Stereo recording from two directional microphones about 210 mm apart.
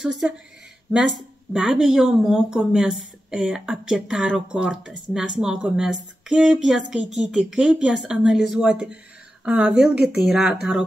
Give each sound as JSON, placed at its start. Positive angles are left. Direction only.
{"t": 0.0, "sound": "speech", "side_deg": -5}
{"t": 1.5, "sound": "speech", "side_deg": -5}